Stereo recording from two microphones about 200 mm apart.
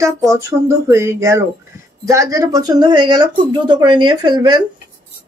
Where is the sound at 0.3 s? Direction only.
15° right (ahead or behind).